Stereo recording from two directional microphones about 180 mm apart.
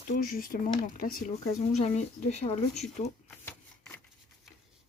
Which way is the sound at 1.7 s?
40° left (ahead or behind).